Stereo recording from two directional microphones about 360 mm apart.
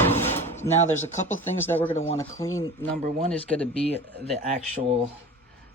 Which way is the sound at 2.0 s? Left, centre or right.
Centre.